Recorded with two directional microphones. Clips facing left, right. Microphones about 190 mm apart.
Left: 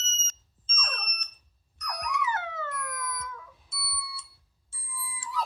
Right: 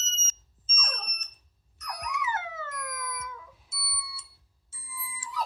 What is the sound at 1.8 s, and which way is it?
Dog, 25° right (ahead or behind).